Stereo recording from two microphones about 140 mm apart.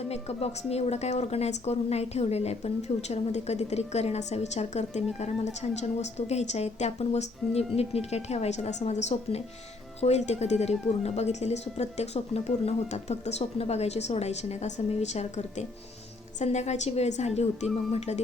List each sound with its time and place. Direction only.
0.1 s a woman's voice: 50° left (ahead or behind)